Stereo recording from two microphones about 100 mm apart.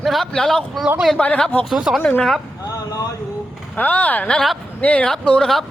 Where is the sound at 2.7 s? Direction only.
35° left (ahead or behind).